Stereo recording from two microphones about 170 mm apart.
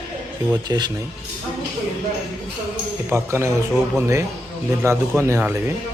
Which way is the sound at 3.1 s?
15° right (ahead or behind).